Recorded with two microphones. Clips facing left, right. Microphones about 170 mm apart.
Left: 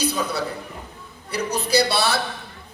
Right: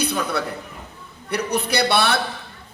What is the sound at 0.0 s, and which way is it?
A man's voice, 60° right (ahead or behind).